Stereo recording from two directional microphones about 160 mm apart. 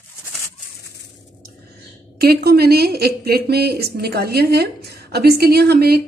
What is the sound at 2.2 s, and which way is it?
A woman's voice, 80° right.